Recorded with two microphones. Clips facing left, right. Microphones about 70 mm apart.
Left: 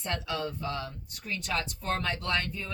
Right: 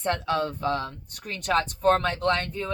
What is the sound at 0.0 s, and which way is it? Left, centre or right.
Speech, right.